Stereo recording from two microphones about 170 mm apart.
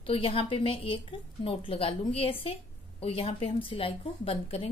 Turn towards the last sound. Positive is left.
turn(degrees=35)  # may be behind; listen again after turning